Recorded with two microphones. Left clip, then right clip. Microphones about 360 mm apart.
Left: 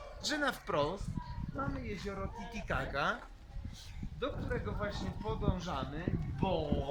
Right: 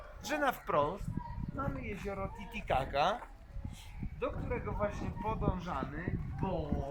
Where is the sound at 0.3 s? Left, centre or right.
Centre.